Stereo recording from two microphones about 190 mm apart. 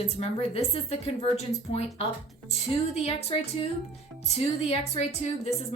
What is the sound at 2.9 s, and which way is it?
A woman's voice, 35° left (ahead or behind).